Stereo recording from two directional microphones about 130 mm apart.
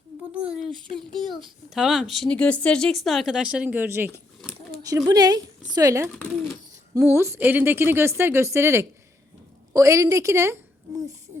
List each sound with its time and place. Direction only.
0.3 s speech: 10° right (ahead or behind)
1.7 s speech: 5° right (ahead or behind)
4.4 s a sound: centre (ahead or behind)
4.8 s a woman's voice: 25° right (ahead or behind)